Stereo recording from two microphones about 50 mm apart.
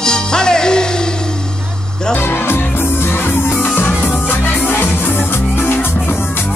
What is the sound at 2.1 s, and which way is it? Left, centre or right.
Music, left.